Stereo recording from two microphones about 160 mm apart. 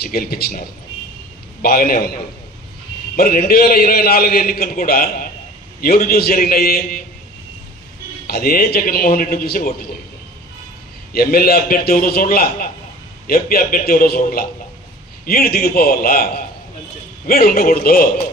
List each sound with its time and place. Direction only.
0.0 s a man's voice: 70° left (ahead or behind)
3.2 s a man's voice: 65° left (ahead or behind)
8.3 s a man's voice: 70° left (ahead or behind)
11.1 s a man's voice: 70° left (ahead or behind)